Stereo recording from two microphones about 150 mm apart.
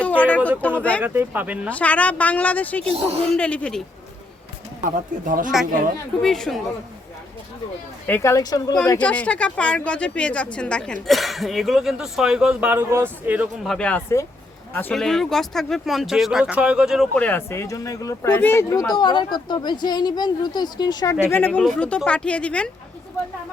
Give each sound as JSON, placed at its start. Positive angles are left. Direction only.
{"t": 0.0, "sound": "a sound", "side_deg": 10}
{"t": 0.6, "sound": "speech", "side_deg": 10}
{"t": 1.0, "sound": "speech", "side_deg": -15}
{"t": 1.7, "sound": "speech", "side_deg": 10}
{"t": 2.8, "sound": "speech", "side_deg": -40}
{"t": 3.2, "sound": "speech", "side_deg": 5}
{"t": 4.8, "sound": "speech", "side_deg": -60}
{"t": 6.2, "sound": "speech", "side_deg": 0}
{"t": 8.0, "sound": "speech", "side_deg": 15}
{"t": 9.0, "sound": "speech", "side_deg": 10}
{"t": 13.7, "sound": "speech", "side_deg": 5}